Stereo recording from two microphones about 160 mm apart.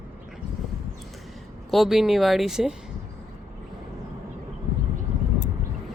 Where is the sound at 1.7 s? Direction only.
Centre (ahead or behind).